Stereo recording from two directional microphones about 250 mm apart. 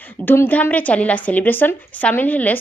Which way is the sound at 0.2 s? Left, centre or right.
Centre.